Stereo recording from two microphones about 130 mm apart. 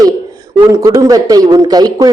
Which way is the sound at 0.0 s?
30° right (ahead or behind).